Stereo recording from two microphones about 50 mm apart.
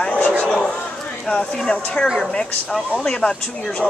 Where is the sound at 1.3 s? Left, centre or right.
Left.